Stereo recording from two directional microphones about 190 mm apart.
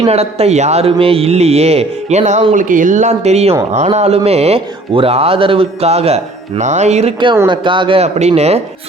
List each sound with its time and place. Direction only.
0.0 s speech: 35° right (ahead or behind)